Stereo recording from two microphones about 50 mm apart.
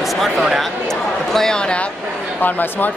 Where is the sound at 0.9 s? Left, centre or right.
Centre.